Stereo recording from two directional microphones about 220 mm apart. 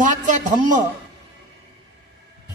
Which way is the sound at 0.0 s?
35° right (ahead or behind).